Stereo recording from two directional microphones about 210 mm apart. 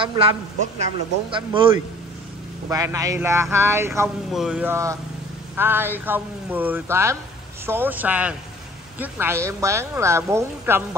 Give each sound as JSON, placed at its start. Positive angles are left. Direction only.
{"t": 0.0, "sound": "speech", "side_deg": -25}
{"t": 1.3, "sound": "a woman's voice", "side_deg": -25}